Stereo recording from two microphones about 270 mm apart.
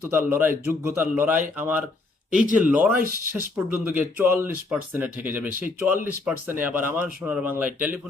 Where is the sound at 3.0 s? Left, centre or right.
Right.